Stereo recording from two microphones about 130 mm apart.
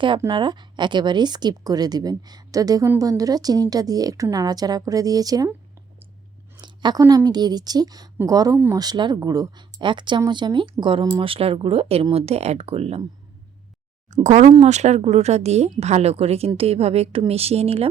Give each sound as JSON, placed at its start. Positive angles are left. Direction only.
{"t": 0.3, "sound": "a woman's voice", "side_deg": -35}
{"t": 6.6, "sound": "a sound", "side_deg": -35}
{"t": 7.3, "sound": "a woman's voice", "side_deg": -30}
{"t": 14.3, "sound": "a woman's voice", "side_deg": -65}